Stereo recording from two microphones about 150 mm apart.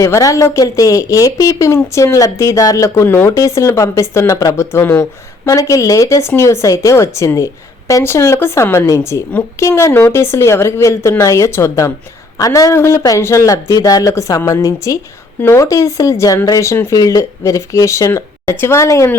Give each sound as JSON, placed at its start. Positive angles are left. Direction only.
{"t": 0.0, "sound": "speech", "side_deg": 20}